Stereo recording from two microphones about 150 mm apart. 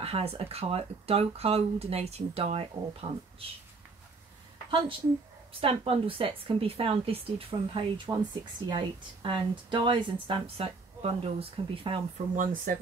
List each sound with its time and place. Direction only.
0.0 s speech: 40° right (ahead or behind)
4.6 s a woman's voice: 35° right (ahead or behind)
12.2 s speech: 55° right (ahead or behind)
12.7 s speech: 70° right (ahead or behind)